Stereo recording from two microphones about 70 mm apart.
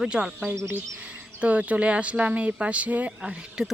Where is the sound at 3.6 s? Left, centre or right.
Centre.